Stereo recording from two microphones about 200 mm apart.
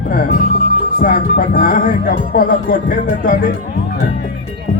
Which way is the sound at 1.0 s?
45° left (ahead or behind).